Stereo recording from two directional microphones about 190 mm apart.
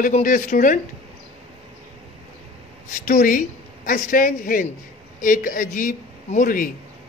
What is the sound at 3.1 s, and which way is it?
Speech, 45° left (ahead or behind).